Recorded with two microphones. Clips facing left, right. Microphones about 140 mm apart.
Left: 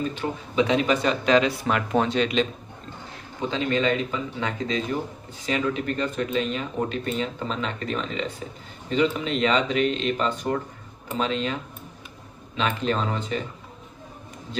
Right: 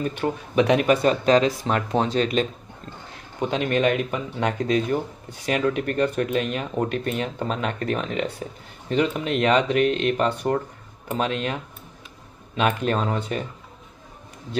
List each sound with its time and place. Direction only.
0.0 s speech: 60° right (ahead or behind); by 1.5 s 40° right (ahead or behind)
1.6 s speech: 30° right (ahead or behind)
3.5 s speech: 60° right (ahead or behind)
12.5 s speech: 55° right (ahead or behind)